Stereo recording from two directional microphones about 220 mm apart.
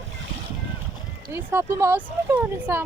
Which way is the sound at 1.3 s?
10° right (ahead or behind).